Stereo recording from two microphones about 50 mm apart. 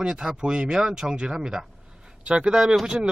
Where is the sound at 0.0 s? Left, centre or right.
Centre.